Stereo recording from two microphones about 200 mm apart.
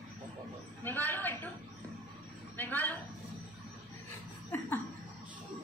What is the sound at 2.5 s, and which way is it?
Speech, 10° left (ahead or behind).